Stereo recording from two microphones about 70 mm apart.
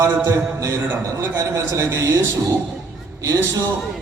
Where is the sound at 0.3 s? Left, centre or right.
Right.